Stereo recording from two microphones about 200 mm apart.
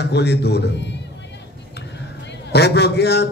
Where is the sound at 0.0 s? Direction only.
55° left (ahead or behind).